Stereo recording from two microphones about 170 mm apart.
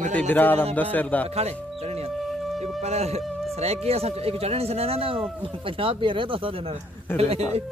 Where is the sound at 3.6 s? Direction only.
40° right (ahead or behind).